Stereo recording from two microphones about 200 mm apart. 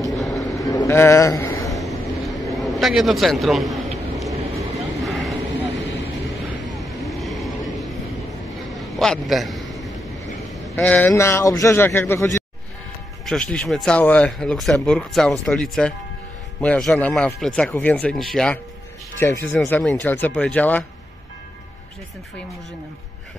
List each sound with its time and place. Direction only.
0.4 s a sound: centre (ahead or behind)
0.7 s a man's voice: 15° left (ahead or behind)
1.7 s vehicle: centre (ahead or behind)
6.7 s vehicle: centre (ahead or behind)
8.7 s a sound: centre (ahead or behind)
10.5 s a man's voice: 10° left (ahead or behind)